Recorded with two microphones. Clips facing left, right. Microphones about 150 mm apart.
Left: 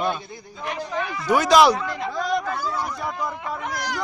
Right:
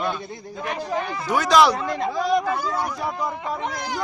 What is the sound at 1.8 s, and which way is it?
Speech, 35° right (ahead or behind).